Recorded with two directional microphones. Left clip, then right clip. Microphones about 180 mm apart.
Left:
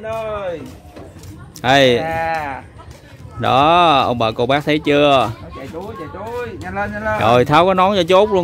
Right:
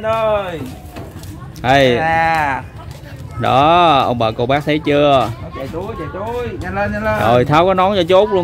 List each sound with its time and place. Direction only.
0.0 s speech: 70° right (ahead or behind)
1.6 s speech: 25° left (ahead or behind)
2.0 s speech: 65° right (ahead or behind)
3.3 s speech: 25° left (ahead or behind)
6.6 s speech: centre (ahead or behind)
7.2 s speech: 30° left (ahead or behind)